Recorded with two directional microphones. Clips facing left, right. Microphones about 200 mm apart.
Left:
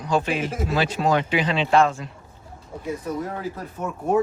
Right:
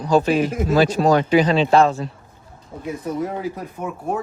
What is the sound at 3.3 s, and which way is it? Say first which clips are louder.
Speech: right 4 dB; 15° right (ahead or behind).